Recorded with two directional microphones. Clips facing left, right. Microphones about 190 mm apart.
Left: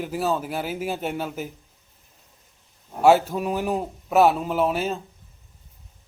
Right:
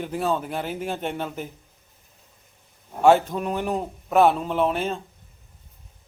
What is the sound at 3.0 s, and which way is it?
A man's voice, 5° left (ahead or behind).